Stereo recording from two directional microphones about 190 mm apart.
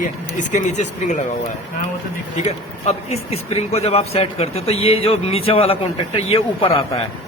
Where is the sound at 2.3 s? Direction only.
35° left (ahead or behind).